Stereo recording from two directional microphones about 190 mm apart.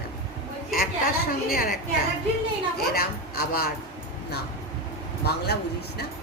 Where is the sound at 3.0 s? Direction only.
55° left (ahead or behind).